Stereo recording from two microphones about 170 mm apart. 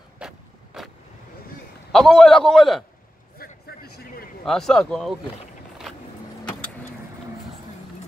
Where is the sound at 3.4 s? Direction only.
70° left (ahead or behind).